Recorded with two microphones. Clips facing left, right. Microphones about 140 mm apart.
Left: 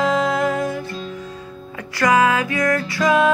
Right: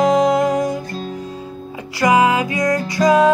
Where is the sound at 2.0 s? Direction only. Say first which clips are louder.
Right 2 dB; 15° right (ahead or behind).